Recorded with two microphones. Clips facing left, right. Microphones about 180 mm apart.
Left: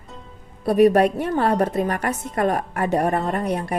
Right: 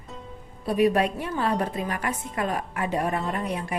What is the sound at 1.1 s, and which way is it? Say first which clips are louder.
A woman's voice: left 6 dB; 60° left (ahead or behind).